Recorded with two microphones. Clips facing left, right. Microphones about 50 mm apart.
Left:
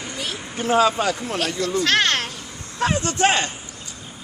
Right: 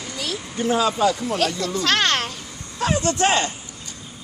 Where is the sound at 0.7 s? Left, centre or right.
Left.